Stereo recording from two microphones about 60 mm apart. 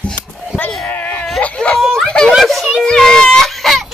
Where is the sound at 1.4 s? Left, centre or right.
Centre.